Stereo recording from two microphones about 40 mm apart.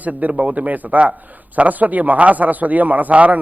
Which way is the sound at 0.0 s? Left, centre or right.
Right.